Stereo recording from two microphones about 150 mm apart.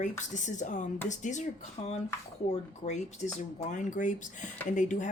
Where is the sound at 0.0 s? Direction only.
55° left (ahead or behind).